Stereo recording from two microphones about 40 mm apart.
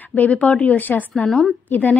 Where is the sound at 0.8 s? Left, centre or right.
Left.